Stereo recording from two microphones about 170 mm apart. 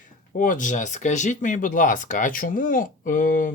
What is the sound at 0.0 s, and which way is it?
Speech, 50° left (ahead or behind).